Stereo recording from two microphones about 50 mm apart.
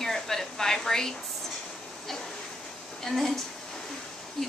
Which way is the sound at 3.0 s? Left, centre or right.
Centre.